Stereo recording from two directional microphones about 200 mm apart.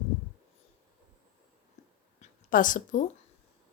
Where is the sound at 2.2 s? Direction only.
40° left (ahead or behind).